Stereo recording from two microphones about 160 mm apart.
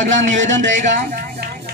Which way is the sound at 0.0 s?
50° right (ahead or behind).